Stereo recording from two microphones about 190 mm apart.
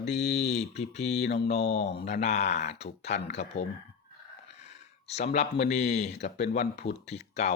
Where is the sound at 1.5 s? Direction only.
35° left (ahead or behind).